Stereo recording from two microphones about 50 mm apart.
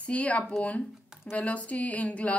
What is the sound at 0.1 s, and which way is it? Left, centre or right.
Speech, left.